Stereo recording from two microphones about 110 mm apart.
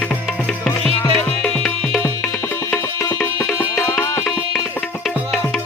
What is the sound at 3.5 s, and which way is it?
Music, 30° left (ahead or behind).